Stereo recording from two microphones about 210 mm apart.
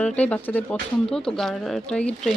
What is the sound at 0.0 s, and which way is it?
Speech, 5° left (ahead or behind).